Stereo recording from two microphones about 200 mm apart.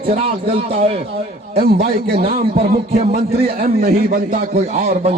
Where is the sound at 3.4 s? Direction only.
50° right (ahead or behind).